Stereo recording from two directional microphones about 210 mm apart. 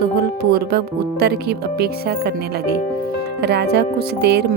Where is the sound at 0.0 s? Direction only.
50° right (ahead or behind).